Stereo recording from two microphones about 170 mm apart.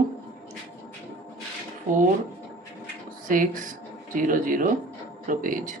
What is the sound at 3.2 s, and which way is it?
Speech, 55° right (ahead or behind).